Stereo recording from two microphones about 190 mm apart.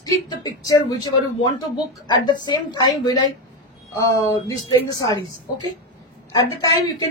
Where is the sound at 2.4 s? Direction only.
20° left (ahead or behind).